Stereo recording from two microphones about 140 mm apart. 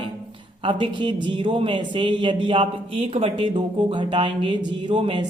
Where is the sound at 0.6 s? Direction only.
35° right (ahead or behind).